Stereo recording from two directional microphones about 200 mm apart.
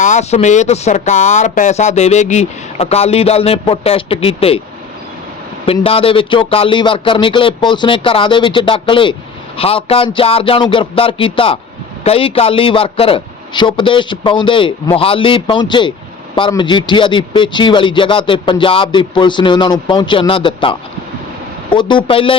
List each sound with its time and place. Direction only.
0.0 s speech: 35° left (ahead or behind)
5.6 s speech: 30° left (ahead or behind)